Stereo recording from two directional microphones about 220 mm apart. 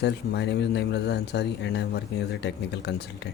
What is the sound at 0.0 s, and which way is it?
Speech, 50° left (ahead or behind).